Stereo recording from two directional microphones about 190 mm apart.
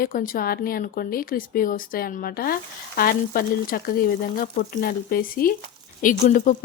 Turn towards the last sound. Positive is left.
turn(degrees=45)  # may be behind; listen again after turning